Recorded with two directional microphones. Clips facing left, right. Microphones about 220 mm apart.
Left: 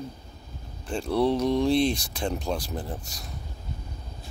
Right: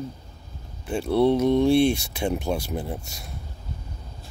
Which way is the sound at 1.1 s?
20° right (ahead or behind).